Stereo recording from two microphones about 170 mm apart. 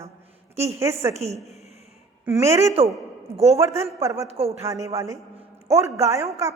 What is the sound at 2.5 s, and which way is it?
A woman's voice, 20° right (ahead or behind).